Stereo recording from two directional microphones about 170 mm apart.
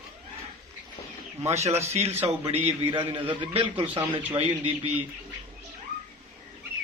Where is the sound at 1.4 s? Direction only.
40° right (ahead or behind).